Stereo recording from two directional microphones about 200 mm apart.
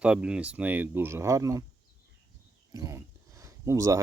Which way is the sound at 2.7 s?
15° right (ahead or behind).